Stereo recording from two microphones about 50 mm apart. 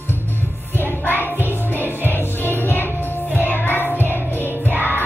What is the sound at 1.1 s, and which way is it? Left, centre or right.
Music, left.